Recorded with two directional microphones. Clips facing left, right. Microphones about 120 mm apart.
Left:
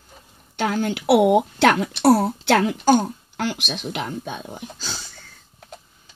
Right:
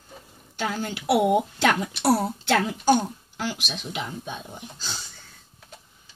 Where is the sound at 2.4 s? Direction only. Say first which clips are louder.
Left 2 dB; 90° left.